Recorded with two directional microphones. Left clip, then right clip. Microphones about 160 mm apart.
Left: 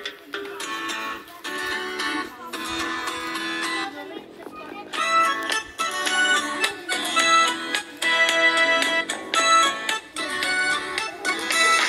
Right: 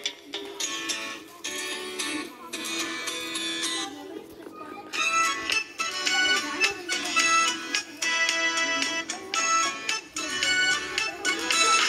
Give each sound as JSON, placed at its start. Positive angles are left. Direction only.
{"t": 0.0, "sound": "music", "side_deg": 90}
{"t": 4.9, "sound": "music", "side_deg": 70}